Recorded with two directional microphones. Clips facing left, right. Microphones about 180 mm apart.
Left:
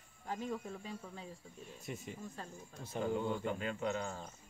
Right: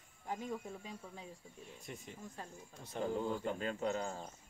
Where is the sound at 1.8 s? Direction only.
5° left (ahead or behind).